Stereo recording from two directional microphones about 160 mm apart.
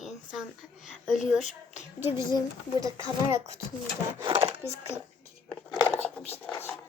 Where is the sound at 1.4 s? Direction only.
45° left (ahead or behind).